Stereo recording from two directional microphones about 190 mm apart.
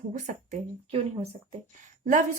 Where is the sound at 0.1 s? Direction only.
40° right (ahead or behind).